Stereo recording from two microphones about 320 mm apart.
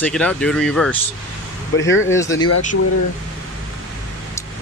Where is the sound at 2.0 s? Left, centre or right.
Centre.